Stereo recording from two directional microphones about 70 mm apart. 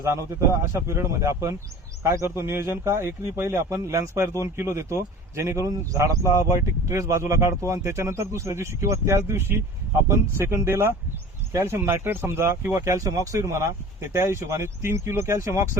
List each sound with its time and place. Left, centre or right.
0.0 s speech: right